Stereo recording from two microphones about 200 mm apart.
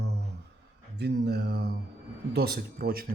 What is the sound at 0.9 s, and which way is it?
Mantra, 55° right (ahead or behind).